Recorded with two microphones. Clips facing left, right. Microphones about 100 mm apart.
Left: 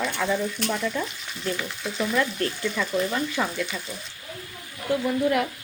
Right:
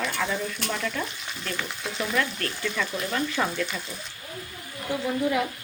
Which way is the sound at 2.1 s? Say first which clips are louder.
Left 3 dB; 15° left (ahead or behind).